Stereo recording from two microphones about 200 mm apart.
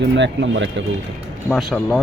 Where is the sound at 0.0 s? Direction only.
65° right (ahead or behind).